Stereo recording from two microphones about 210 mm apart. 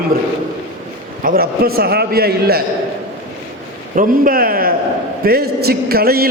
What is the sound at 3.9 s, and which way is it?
A man's voice, 40° right (ahead or behind).